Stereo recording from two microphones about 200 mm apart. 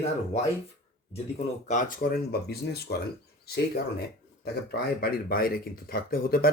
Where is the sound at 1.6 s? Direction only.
40° left (ahead or behind).